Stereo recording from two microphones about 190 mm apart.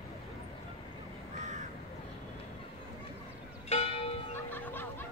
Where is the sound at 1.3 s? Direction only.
40° right (ahead or behind).